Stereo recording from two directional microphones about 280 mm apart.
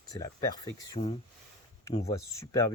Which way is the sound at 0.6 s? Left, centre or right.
Left.